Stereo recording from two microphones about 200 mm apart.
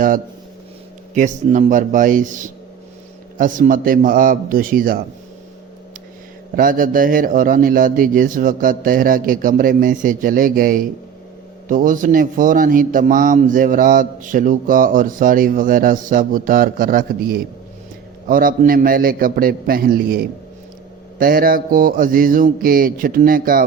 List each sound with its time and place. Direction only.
1.1 s a man's voice: 40° right (ahead or behind)
6.6 s a man's voice: 45° right (ahead or behind)